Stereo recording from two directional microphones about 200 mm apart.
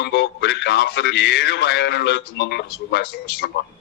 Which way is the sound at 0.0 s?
55° left (ahead or behind).